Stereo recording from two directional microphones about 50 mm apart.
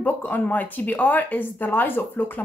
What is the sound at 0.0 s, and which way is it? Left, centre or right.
A woman's voice, left.